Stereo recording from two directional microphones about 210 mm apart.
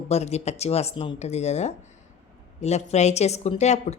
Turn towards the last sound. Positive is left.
turn(degrees=30)  # may be behind; listen again after turning